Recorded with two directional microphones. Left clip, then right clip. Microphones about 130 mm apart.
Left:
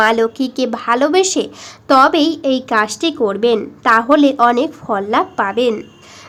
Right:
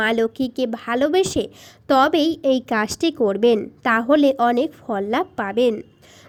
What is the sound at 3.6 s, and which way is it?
Speech, 35° right (ahead or behind).